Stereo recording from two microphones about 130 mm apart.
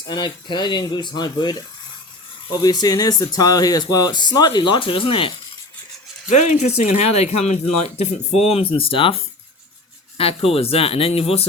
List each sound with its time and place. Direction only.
0.0 s speech: 35° left (ahead or behind)
6.3 s speech: 65° left (ahead or behind)
8.4 s speech: 45° left (ahead or behind)